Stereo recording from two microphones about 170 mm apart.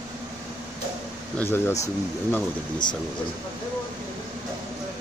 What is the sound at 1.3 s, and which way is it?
Speech, 10° left (ahead or behind).